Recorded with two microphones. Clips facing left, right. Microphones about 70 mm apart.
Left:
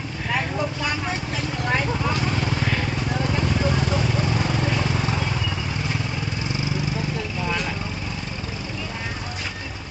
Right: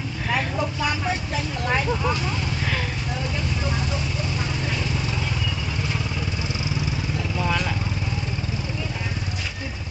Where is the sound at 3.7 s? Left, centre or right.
Left.